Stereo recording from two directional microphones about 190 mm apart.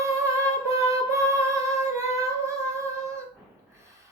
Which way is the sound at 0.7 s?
15° right (ahead or behind).